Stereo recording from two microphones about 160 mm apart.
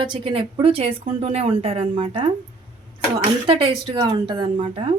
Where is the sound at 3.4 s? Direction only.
35° right (ahead or behind).